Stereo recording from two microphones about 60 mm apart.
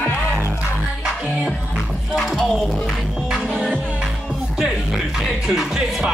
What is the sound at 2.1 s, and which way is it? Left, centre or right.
Music, centre.